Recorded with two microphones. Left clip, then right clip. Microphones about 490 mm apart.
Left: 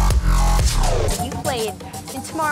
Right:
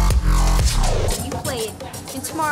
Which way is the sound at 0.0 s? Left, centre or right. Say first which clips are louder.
Left 1 dB; centre.